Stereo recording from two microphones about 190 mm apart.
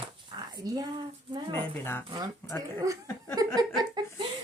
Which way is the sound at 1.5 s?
10° left (ahead or behind).